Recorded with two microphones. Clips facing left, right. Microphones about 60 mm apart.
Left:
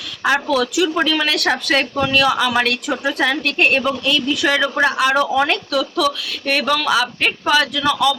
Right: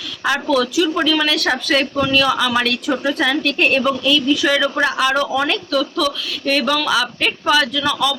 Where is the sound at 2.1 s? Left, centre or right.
Left.